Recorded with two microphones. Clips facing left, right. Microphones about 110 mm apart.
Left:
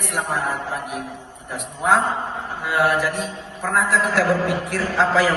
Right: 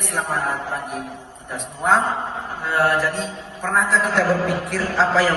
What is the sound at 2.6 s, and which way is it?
Speech, 15° left (ahead or behind).